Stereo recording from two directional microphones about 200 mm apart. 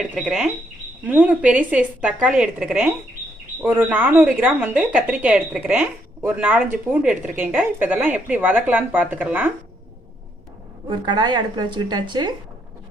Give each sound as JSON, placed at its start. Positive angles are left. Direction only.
{"t": 0.2, "sound": "speech", "side_deg": 0}
{"t": 10.8, "sound": "speech", "side_deg": -20}